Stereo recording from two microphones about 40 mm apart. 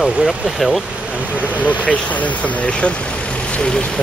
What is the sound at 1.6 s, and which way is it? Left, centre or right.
Speech, left.